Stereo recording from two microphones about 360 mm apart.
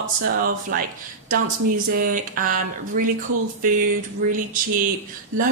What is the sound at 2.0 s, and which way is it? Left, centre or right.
Speech, right.